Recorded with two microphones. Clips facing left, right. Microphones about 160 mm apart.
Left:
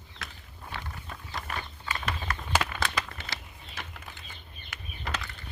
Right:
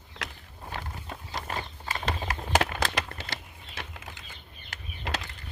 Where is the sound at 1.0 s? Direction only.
25° right (ahead or behind).